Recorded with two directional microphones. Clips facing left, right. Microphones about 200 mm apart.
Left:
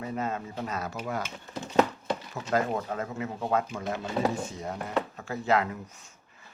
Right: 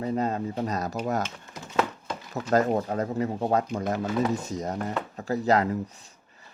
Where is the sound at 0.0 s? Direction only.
35° right (ahead or behind).